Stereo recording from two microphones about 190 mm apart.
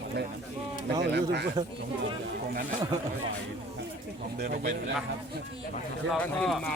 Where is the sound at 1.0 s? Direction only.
65° right (ahead or behind).